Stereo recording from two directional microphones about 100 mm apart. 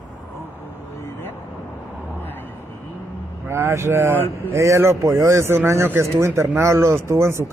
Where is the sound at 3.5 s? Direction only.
25° right (ahead or behind).